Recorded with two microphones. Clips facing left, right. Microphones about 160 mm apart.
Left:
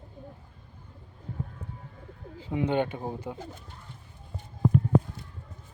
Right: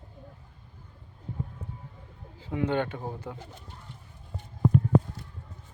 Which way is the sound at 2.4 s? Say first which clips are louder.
Left 1 dB; 20° left (ahead or behind).